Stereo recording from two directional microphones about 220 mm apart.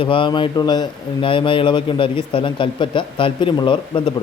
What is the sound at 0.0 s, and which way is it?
Speech, 20° left (ahead or behind).